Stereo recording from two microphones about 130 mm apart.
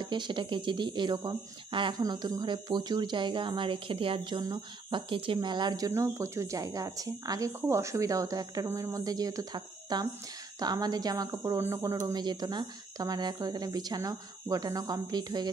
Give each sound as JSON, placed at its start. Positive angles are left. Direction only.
{"t": 0.0, "sound": "a woman's voice", "side_deg": -35}